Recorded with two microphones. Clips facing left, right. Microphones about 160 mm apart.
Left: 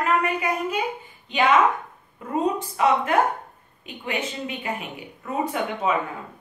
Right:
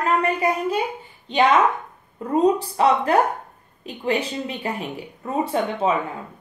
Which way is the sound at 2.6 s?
35° right (ahead or behind).